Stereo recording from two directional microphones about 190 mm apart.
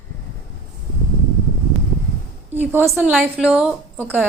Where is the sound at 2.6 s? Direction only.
10° right (ahead or behind).